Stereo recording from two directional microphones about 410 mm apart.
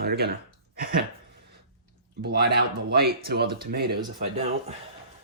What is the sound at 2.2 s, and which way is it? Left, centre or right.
Speech, right.